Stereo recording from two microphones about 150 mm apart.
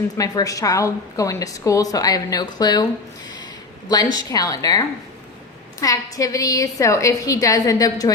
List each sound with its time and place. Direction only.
0.2 s a woman's voice: 25° left (ahead or behind)
3.8 s a woman's voice: 25° left (ahead or behind)